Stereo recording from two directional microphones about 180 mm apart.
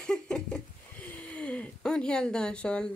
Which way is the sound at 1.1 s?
5° left (ahead or behind).